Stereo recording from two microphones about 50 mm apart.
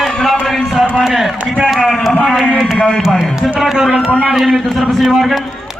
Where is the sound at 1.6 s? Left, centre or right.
Centre.